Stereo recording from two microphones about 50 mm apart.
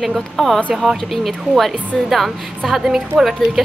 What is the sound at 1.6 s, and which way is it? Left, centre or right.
A woman's voice, centre.